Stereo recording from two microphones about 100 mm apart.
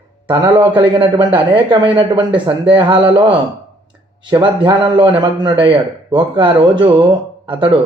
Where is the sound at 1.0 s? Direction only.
50° right (ahead or behind).